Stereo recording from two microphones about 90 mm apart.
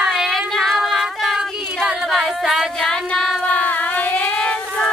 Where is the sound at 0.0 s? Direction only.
Centre (ahead or behind).